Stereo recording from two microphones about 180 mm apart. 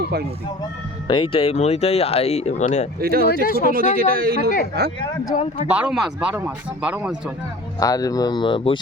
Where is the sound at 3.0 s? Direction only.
55° right (ahead or behind).